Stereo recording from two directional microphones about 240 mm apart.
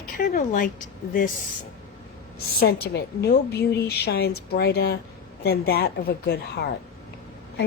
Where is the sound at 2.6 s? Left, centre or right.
Left.